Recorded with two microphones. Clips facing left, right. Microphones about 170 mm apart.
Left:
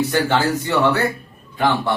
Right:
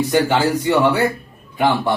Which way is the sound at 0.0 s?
15° right (ahead or behind).